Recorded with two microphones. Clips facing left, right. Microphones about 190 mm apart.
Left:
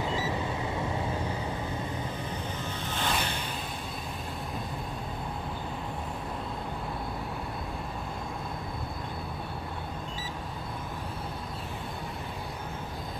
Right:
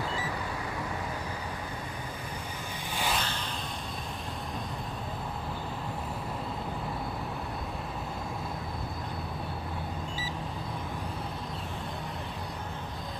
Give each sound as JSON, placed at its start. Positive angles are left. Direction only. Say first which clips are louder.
{"t": 0.0, "sound": "vehicle", "louder": "left 4 dB", "side_deg": 20}
{"t": 2.9, "sound": "vehicle", "louder": "even", "side_deg": -10}
{"t": 3.2, "sound": "vehicle", "louder": "left 2 dB", "side_deg": 10}